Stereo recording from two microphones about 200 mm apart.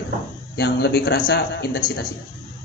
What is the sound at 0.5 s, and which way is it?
Speech, 50° left (ahead or behind).